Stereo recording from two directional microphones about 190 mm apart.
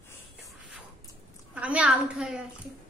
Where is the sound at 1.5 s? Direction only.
5° right (ahead or behind).